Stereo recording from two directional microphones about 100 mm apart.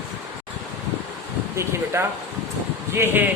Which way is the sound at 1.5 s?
25° right (ahead or behind).